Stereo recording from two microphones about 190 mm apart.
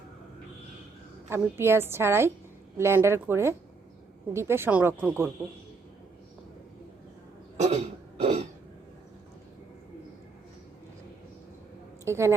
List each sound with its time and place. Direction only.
1.3 s a woman's voice: 15° right (ahead or behind)
7.5 s cough: 35° right (ahead or behind)
8.2 s throat clearing: 35° right (ahead or behind)
12.0 s a woman's voice: 15° right (ahead or behind)